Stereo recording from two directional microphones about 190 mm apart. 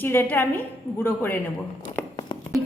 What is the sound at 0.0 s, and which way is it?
A woman's voice, 10° left (ahead or behind).